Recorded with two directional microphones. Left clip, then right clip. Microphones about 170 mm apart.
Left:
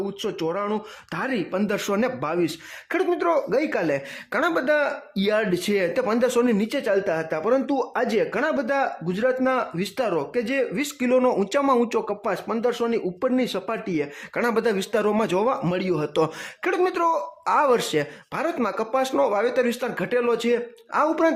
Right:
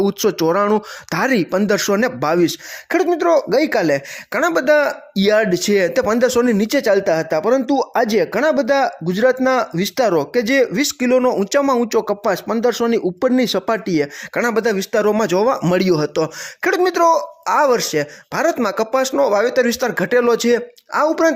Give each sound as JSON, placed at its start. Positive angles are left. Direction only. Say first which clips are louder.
{"t": 0.0, "sound": "speech", "louder": "right 10 dB", "side_deg": -45}
{"t": 15.7, "sound": "speech", "louder": "right 9 dB", "side_deg": -40}
{"t": 16.6, "sound": "speech", "louder": "right 7 dB", "side_deg": -30}
{"t": 18.3, "sound": "speech", "louder": "right 8 dB", "side_deg": -30}
{"t": 20.9, "sound": "speech", "louder": "right 5 dB", "side_deg": -25}